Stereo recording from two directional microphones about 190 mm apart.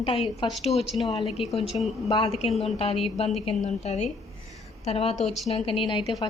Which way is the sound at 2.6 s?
30° left (ahead or behind).